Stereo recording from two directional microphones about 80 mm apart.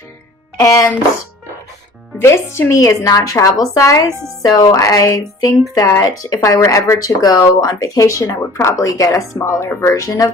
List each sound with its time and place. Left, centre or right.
2.2 s speech: left
4.4 s speech: left
9.4 s speech: left